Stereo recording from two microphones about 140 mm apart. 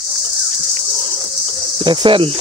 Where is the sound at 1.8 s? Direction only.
35° right (ahead or behind).